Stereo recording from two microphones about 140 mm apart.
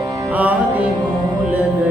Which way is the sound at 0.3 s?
10° right (ahead or behind).